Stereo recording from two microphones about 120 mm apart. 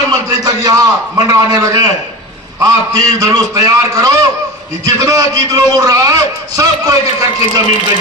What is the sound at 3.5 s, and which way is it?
A man's voice, 25° right (ahead or behind).